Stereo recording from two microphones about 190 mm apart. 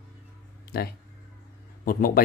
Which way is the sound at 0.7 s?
50° left (ahead or behind).